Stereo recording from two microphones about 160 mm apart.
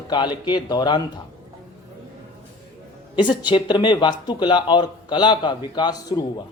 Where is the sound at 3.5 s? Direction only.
30° left (ahead or behind).